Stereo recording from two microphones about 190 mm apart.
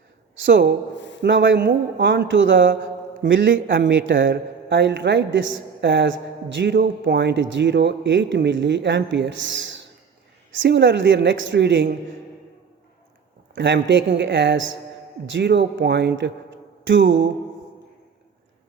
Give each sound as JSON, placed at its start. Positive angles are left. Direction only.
{"t": 0.4, "sound": "a man's voice", "side_deg": -70}
{"t": 13.6, "sound": "a man's voice", "side_deg": -70}